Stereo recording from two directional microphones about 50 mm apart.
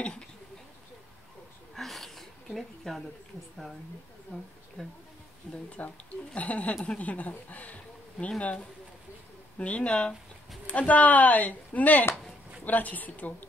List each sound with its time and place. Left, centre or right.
1.8 s a sound: centre
4.8 s speech: centre
6.3 s speech: left